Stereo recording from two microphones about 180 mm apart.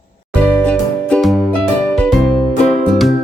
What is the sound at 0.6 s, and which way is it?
Music, 5° left (ahead or behind).